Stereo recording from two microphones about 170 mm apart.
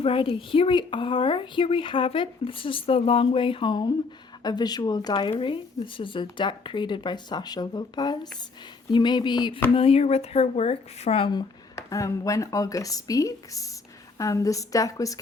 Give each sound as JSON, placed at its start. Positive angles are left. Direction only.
{"t": 0.0, "sound": "speech", "side_deg": 30}